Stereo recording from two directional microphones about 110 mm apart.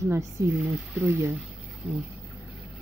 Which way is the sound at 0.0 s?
25° right (ahead or behind).